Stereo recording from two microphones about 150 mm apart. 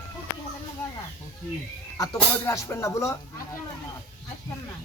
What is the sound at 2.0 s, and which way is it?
Speech, 20° left (ahead or behind).